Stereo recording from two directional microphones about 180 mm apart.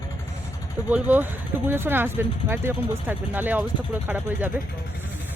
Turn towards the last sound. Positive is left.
turn(degrees=-10)  # may be behind; listen again after turning